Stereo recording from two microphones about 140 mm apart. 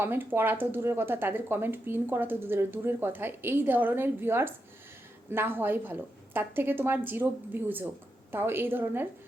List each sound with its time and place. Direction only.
0.0 s speech: 15° right (ahead or behind)